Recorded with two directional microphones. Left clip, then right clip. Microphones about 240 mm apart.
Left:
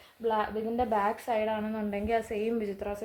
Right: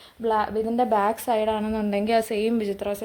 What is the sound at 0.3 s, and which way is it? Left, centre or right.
A woman's voice, right.